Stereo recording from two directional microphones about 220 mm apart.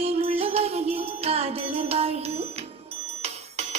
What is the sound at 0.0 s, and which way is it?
Music, 25° right (ahead or behind).